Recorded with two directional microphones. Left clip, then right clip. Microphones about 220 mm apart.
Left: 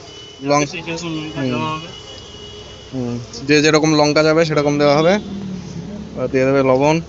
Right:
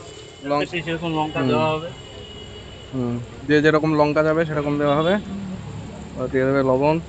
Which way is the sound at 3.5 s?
10° left (ahead or behind).